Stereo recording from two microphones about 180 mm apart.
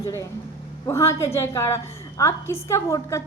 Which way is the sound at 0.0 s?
15° left (ahead or behind).